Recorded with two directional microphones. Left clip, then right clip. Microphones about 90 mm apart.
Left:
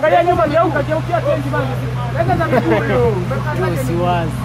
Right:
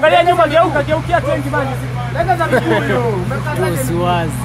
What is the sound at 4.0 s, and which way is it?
Speech, 25° right (ahead or behind).